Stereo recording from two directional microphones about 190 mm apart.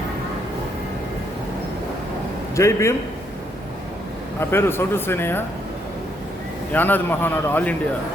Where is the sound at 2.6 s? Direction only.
15° left (ahead or behind).